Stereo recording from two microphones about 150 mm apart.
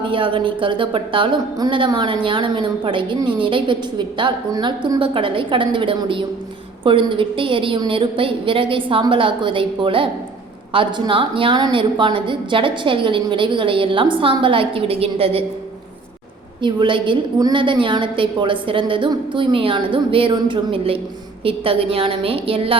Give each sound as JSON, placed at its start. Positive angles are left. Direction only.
{"t": 0.0, "sound": "a woman's voice", "side_deg": -35}
{"t": 16.6, "sound": "a woman's voice", "side_deg": -30}